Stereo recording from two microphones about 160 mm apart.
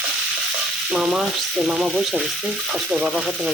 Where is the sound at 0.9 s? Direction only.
5° right (ahead or behind).